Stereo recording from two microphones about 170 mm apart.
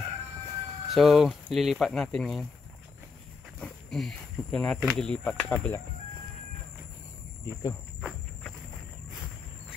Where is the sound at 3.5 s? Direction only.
Centre (ahead or behind).